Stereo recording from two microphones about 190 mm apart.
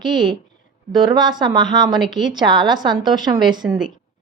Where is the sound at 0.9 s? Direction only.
20° right (ahead or behind).